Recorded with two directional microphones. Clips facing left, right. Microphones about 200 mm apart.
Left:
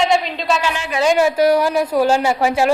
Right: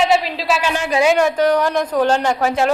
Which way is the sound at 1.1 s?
5° left (ahead or behind).